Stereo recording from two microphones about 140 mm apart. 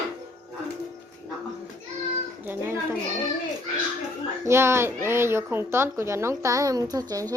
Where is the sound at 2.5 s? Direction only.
15° right (ahead or behind).